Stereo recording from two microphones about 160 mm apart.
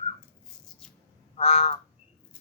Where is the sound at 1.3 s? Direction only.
40° left (ahead or behind).